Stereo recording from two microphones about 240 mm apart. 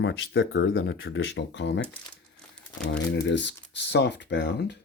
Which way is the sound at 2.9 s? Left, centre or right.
Left.